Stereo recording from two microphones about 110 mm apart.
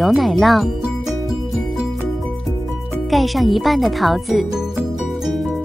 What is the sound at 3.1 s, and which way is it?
Speech, centre (ahead or behind).